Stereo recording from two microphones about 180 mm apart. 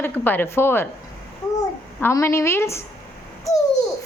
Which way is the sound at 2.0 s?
15° left (ahead or behind).